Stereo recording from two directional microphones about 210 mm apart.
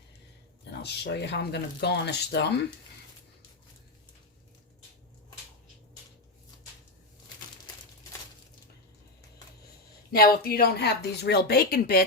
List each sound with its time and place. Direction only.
0.6 s speech: 50° left (ahead or behind)
10.1 s speech: 45° left (ahead or behind)